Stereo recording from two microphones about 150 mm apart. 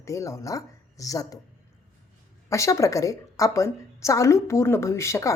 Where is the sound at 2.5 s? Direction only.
20° left (ahead or behind).